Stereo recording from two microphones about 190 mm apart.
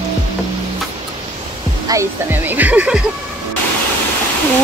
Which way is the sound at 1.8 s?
15° right (ahead or behind).